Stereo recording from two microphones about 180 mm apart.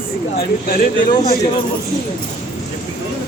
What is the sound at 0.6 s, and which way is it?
Speech, 50° left (ahead or behind).